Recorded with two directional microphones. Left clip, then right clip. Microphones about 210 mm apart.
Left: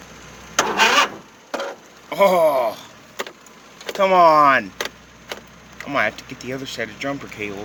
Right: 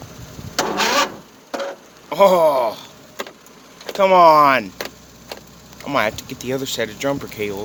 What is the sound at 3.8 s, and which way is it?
Speech, 5° right (ahead or behind).